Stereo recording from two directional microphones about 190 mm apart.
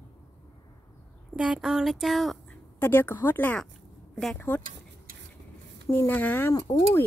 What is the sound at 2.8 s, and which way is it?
Speech, 10° left (ahead or behind).